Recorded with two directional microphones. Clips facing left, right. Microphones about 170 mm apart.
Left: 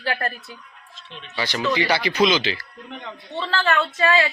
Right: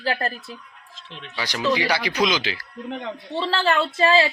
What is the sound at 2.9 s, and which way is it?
A woman's voice, 30° right (ahead or behind).